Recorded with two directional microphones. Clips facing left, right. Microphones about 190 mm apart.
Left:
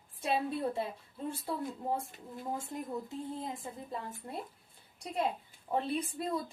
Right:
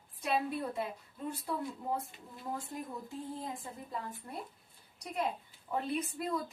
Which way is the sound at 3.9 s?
25° left (ahead or behind).